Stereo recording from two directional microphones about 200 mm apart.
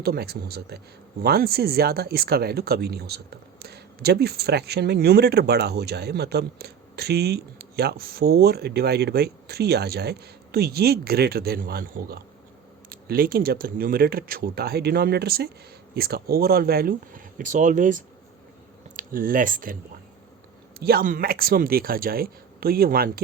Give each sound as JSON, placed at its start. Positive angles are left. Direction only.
{"t": 0.0, "sound": "speech", "side_deg": -50}
{"t": 20.7, "sound": "speech", "side_deg": -50}